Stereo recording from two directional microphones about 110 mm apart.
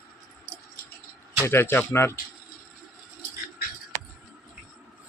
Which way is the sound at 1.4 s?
20° left (ahead or behind).